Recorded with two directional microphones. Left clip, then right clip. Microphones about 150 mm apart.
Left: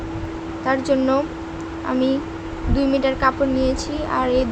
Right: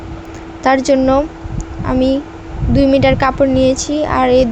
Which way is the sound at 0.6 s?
55° right (ahead or behind).